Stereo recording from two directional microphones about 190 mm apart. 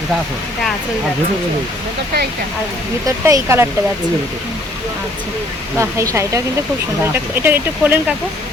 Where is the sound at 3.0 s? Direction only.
15° right (ahead or behind).